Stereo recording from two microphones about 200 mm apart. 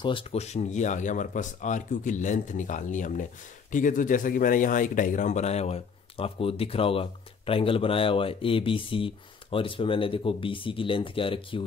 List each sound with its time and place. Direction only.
0.0 s a man's voice: 30° left (ahead or behind)